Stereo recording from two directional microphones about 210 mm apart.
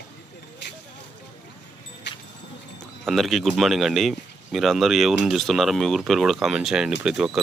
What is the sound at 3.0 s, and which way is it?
Speech, centre (ahead or behind).